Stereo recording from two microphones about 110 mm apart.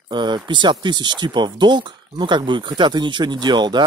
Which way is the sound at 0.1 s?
45° right (ahead or behind).